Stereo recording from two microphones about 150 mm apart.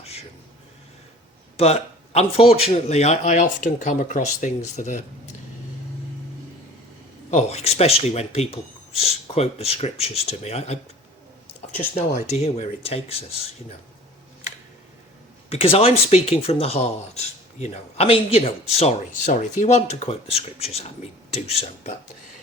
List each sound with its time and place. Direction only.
0.0 s a sound: 40° left (ahead or behind)
1.5 s speech: 45° left (ahead or behind)
7.3 s speech: 50° left (ahead or behind)
11.9 s speech: 45° left (ahead or behind)
15.4 s speech: 40° left (ahead or behind)